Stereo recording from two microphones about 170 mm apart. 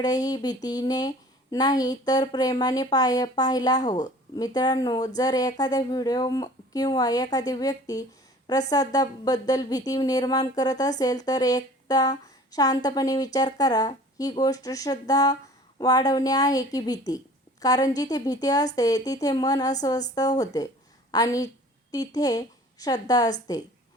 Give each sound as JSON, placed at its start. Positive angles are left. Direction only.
{"t": 0.0, "sound": "a woman's voice", "side_deg": 25}